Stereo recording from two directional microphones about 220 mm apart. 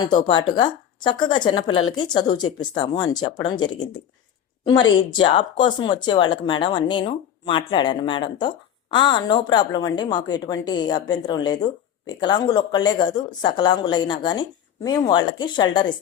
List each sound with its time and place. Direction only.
0.0 s speech: 20° left (ahead or behind)